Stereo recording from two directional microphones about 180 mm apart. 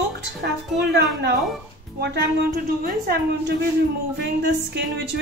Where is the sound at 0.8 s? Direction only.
70° right (ahead or behind).